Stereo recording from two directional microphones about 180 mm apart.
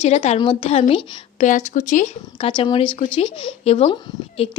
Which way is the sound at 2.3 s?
30° left (ahead or behind).